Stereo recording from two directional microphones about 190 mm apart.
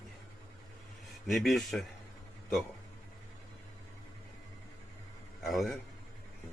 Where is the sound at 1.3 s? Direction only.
Centre (ahead or behind).